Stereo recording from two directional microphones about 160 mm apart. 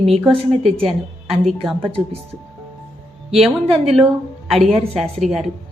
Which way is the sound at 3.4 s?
Centre (ahead or behind).